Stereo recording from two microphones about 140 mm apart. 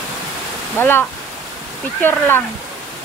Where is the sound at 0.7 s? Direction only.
15° left (ahead or behind).